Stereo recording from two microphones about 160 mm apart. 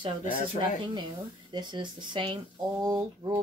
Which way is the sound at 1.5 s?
30° right (ahead or behind).